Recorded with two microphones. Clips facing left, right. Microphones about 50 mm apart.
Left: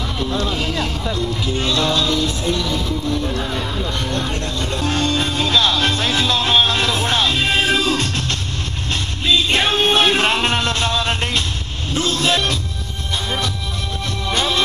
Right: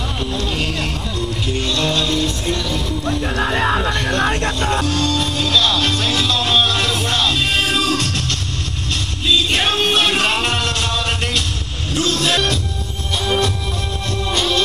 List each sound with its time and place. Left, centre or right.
0.3 s music: left
1.6 s music: left
1.9 s music: right
2.7 s vehicle: right
4.8 s music: left
14.3 s music: left